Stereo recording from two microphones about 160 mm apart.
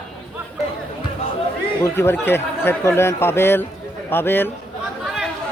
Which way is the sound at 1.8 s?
15° left (ahead or behind).